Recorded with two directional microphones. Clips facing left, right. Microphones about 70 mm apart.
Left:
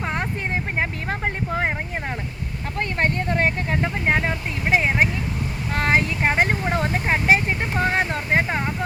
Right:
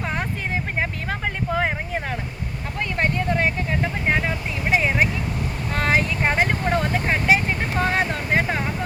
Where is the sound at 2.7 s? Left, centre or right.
Left.